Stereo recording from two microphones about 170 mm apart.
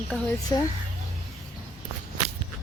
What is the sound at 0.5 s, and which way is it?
Speech, 25° left (ahead or behind).